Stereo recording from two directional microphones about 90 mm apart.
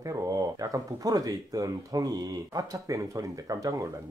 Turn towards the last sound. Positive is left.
turn(degrees=-40)  # may be behind; listen again after turning